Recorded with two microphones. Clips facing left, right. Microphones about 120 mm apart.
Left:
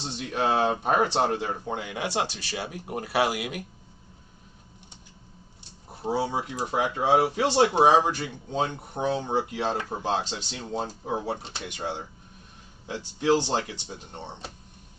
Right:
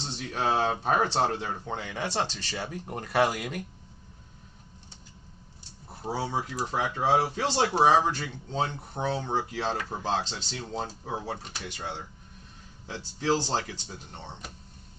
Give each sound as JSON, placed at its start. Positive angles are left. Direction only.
{"t": 0.0, "sound": "speech", "side_deg": 15}
{"t": 6.0, "sound": "speech", "side_deg": 15}
{"t": 13.1, "sound": "speech", "side_deg": 15}